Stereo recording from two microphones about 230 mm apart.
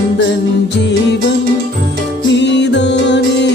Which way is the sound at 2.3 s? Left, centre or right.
Left.